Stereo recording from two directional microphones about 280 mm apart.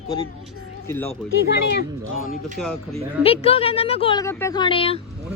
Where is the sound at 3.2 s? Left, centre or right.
Left.